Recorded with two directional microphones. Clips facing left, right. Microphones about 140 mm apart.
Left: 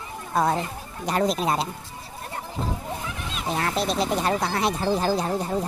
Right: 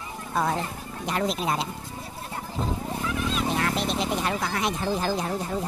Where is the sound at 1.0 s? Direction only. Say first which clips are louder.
Left 4 dB; 40° left (ahead or behind).